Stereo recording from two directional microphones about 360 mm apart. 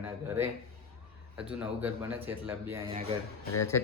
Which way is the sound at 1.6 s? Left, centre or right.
Centre.